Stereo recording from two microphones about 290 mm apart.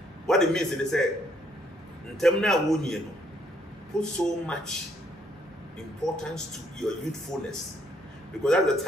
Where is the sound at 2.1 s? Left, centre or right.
Centre.